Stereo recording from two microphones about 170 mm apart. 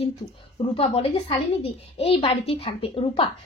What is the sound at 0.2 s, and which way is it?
A woman's voice, 25° left (ahead or behind).